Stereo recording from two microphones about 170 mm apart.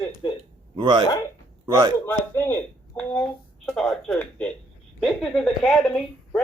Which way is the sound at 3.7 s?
5° left (ahead or behind).